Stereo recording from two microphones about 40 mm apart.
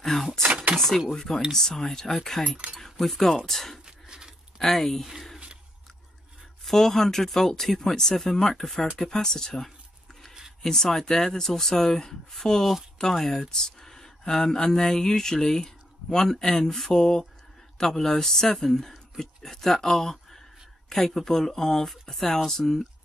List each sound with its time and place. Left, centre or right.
0.0 s speech: centre
2.5 s speech: right
2.8 s speech: centre
3.8 s a sound: right
4.6 s speech: centre
6.6 s speech: centre